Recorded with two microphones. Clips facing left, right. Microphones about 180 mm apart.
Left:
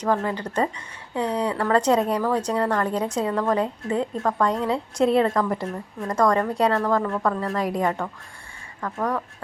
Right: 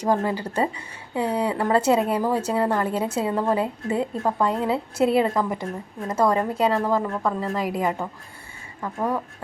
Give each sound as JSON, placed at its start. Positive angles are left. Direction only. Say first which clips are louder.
{"t": 0.0, "sound": "a woman's voice", "louder": "right 1 dB", "side_deg": -10}
{"t": 1.5, "sound": "speech", "louder": "right 1 dB", "side_deg": -25}
{"t": 1.7, "sound": "a woman's voice", "louder": "even", "side_deg": -5}
{"t": 7.5, "sound": "a woman's voice", "louder": "left 1 dB", "side_deg": 0}